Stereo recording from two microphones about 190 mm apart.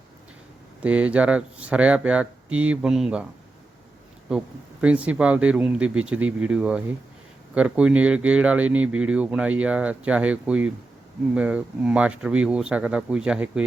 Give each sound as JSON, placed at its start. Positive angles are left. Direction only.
{"t": 0.8, "sound": "speech", "side_deg": -5}
{"t": 4.3, "sound": "speech", "side_deg": -5}